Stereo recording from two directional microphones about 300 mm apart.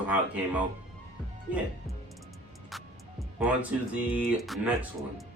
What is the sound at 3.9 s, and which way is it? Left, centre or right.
Speech, centre.